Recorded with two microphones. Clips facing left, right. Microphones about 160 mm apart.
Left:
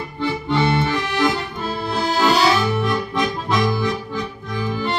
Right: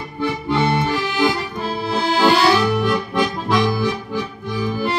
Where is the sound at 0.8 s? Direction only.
Centre (ahead or behind).